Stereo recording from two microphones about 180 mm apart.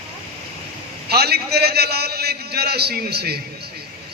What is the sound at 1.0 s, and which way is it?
A man's voice, 60° right (ahead or behind).